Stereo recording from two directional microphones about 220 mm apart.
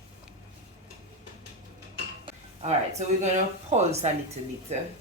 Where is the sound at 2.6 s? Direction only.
30° right (ahead or behind).